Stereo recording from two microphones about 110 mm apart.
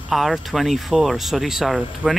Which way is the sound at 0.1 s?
Centre (ahead or behind).